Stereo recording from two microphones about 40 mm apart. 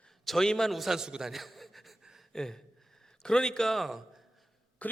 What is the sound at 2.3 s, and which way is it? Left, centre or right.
Speech, centre.